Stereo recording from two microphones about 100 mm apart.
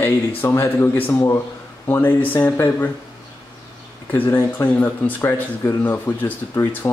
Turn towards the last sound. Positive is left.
turn(degrees=20)  # may be behind; listen again after turning